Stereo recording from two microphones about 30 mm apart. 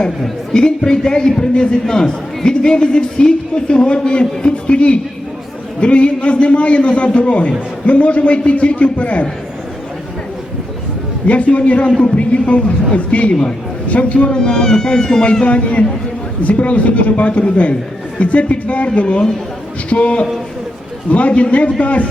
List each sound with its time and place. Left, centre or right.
0.9 s a man's voice: left
11.3 s a man's voice: left
14.3 s speech: left
15.2 s speech: left
15.4 s a man's voice: left
19.9 s a man's voice: left